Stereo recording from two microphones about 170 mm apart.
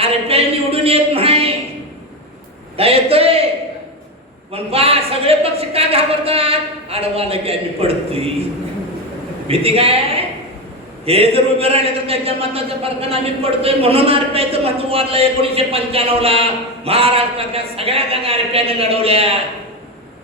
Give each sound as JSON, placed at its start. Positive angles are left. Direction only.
{"t": 0.0, "sound": "a sound", "side_deg": -35}
{"t": 2.7, "sound": "a man's voice", "side_deg": -35}
{"t": 4.5, "sound": "a man's voice", "side_deg": -35}
{"t": 9.5, "sound": "a man's voice", "side_deg": -35}